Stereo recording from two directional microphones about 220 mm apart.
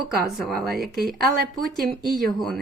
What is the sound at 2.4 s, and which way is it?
Speech, centre (ahead or behind).